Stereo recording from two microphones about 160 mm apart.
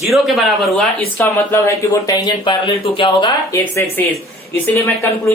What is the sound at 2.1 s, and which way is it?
Speech, 25° left (ahead or behind).